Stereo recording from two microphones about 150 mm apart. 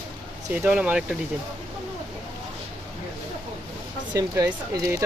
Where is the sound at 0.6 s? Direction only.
10° right (ahead or behind).